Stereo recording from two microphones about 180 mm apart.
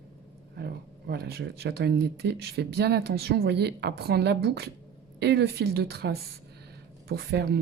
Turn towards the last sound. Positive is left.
turn(degrees=-65)  # may be behind; listen again after turning